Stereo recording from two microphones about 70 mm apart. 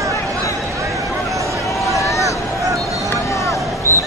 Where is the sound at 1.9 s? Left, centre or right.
Left.